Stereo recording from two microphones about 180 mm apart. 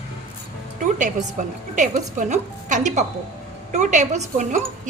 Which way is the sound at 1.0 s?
45° right (ahead or behind).